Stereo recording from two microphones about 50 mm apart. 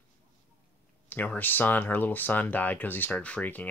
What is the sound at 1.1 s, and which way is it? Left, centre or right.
Speech, left.